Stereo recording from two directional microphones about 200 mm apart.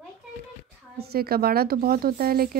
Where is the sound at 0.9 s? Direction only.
50° right (ahead or behind).